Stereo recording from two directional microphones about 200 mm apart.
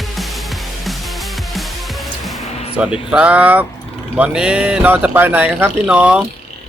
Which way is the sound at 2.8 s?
5° right (ahead or behind).